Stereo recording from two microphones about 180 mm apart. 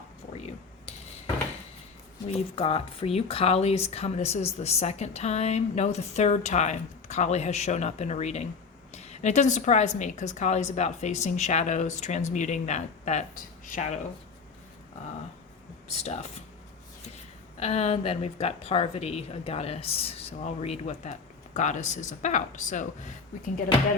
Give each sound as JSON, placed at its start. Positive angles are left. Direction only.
{"t": 2.2, "sound": "speech", "side_deg": 35}
{"t": 15.9, "sound": "speech", "side_deg": 35}
{"t": 17.6, "sound": "speech", "side_deg": 35}